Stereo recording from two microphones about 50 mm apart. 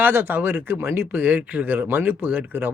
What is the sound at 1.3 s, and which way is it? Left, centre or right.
Speech, right.